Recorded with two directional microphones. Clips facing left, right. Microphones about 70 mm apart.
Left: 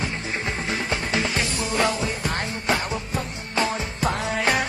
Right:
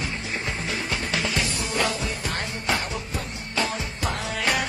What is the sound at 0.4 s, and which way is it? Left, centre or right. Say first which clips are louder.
Music: left 4 dB; left.